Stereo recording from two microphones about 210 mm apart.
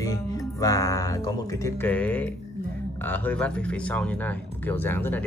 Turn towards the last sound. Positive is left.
turn(degrees=10)  # may be behind; listen again after turning